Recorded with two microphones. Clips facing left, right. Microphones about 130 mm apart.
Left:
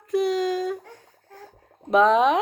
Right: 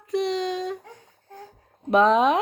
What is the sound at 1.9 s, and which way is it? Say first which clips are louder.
Speech: even; centre (ahead or behind).